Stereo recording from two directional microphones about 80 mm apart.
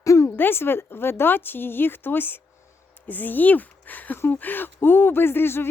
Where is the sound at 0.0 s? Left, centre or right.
Left.